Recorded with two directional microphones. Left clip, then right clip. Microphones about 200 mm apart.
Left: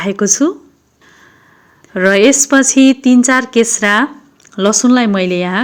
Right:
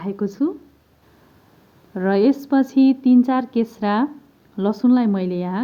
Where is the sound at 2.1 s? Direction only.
15° left (ahead or behind).